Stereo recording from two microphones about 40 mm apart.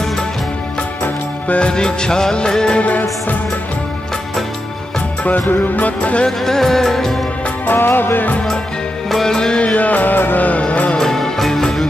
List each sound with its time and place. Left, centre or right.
1.6 s music: left
5.5 s music: left
6.2 s music of bollywood: centre
7.6 s music: left
9.1 s music of bollywood: centre
9.8 s music: left
10.6 s music: left
11.0 s music of bollywood: centre